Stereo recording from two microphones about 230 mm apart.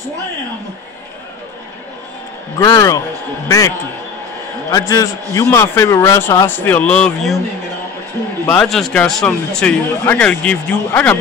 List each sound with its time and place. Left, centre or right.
2.6 s speech: centre
8.5 s speech: centre